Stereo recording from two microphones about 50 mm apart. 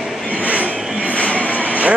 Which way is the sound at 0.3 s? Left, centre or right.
Right.